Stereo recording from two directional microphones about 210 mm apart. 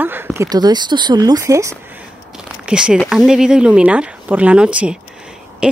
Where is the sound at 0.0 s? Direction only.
10° right (ahead or behind).